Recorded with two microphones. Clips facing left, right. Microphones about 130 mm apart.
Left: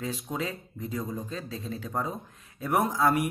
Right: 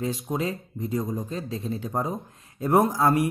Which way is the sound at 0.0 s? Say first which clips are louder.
Right 5 dB; 30° right (ahead or behind).